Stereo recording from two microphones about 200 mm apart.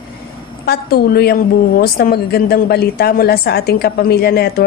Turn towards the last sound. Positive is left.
turn(degrees=50)  # may be behind; listen again after turning